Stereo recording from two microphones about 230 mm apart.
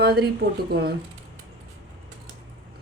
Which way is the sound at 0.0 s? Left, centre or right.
Right.